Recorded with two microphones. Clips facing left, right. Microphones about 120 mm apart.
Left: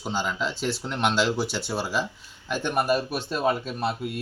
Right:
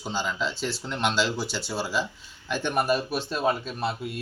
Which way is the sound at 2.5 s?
5° left (ahead or behind).